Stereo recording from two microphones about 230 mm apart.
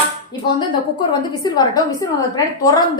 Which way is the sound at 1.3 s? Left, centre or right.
Centre.